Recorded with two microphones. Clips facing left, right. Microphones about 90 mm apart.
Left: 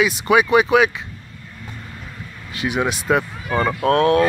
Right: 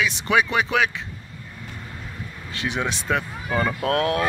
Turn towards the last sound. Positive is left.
turn(degrees=-5)  # may be behind; listen again after turning